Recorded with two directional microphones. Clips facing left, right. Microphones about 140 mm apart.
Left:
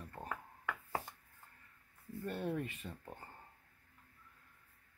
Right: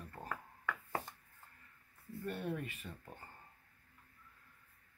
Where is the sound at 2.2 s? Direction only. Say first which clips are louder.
Left 2 dB; 25° left (ahead or behind).